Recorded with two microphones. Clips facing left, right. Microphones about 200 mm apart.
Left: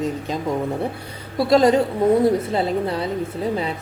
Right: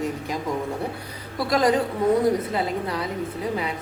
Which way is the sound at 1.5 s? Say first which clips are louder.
Left 5 dB; 25° left (ahead or behind).